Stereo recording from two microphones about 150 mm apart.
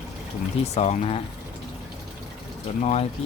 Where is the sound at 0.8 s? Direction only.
50° left (ahead or behind).